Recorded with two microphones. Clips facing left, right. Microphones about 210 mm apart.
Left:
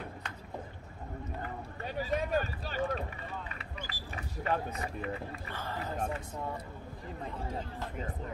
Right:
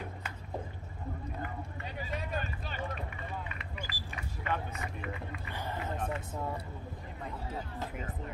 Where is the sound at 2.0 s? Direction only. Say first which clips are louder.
Left 7 dB; 40° left (ahead or behind).